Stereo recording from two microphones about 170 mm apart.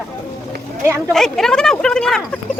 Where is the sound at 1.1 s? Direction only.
5° left (ahead or behind).